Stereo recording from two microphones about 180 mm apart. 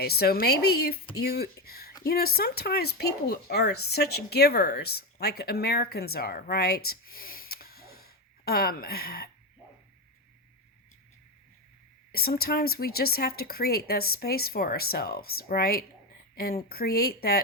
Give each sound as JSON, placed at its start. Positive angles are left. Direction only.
{"t": 0.0, "sound": "speech", "side_deg": 60}
{"t": 12.1, "sound": "speech", "side_deg": 60}